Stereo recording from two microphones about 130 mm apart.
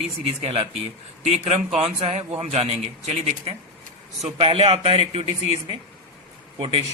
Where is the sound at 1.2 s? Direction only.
60° right (ahead or behind).